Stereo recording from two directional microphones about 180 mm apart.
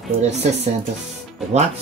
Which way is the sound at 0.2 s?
40° right (ahead or behind).